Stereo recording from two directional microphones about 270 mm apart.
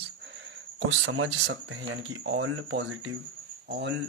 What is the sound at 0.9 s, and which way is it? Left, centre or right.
Speech, right.